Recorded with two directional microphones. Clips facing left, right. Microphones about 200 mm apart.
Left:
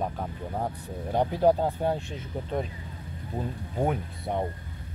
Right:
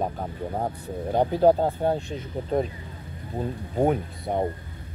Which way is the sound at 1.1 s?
30° right (ahead or behind).